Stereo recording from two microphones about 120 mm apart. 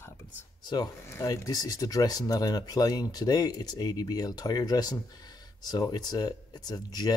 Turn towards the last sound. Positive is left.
turn(degrees=35)  # may be behind; listen again after turning